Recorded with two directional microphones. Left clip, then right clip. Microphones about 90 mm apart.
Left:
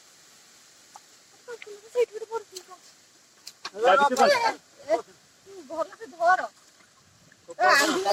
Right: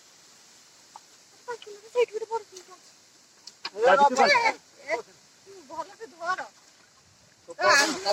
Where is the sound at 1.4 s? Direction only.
25° left (ahead or behind).